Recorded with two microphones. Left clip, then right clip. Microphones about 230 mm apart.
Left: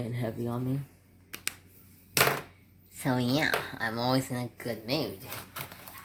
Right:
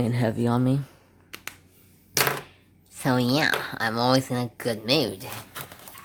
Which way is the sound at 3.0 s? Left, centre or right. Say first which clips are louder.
Right 6 dB; centre.